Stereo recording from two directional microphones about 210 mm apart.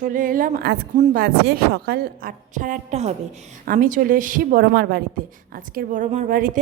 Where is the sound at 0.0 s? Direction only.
40° right (ahead or behind).